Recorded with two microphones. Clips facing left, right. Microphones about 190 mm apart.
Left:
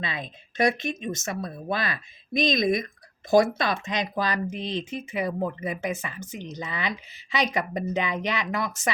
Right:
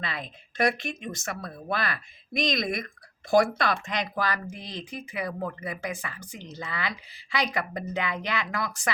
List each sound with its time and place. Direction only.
0.0 s speech: 20° left (ahead or behind)